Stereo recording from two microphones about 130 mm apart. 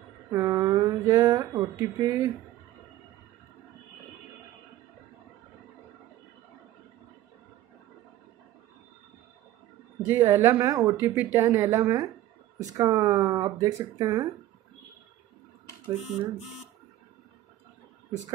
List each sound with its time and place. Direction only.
0.3 s speech: 25° right (ahead or behind)
10.0 s speech: 20° right (ahead or behind)